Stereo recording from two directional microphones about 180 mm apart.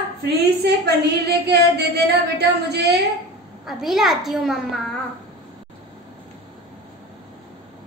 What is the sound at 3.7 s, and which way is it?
Speech, centre (ahead or behind).